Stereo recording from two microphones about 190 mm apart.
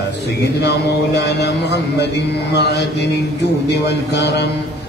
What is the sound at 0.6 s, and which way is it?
A man's voice, 65° left (ahead or behind).